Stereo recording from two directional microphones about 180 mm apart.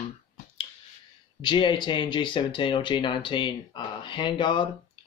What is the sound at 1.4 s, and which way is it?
Speech, 25° left (ahead or behind).